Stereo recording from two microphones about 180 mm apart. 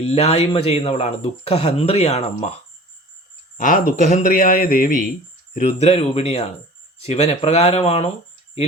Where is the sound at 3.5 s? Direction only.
50° left (ahead or behind).